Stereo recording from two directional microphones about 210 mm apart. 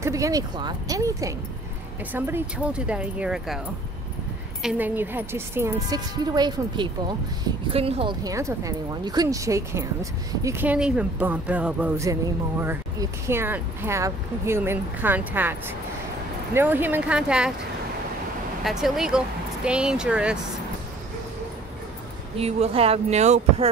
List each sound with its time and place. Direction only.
0.0 s speech: 15° right (ahead or behind)
4.6 s speech: 10° right (ahead or behind)
16.5 s speech: 10° right (ahead or behind)
18.6 s speech: centre (ahead or behind)
22.4 s speech: 30° right (ahead or behind)